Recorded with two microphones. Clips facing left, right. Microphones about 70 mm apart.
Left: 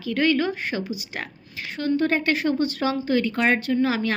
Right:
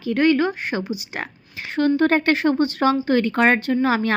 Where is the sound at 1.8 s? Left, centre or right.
Right.